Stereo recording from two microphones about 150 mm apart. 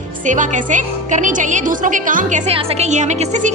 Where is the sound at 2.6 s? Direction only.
45° right (ahead or behind).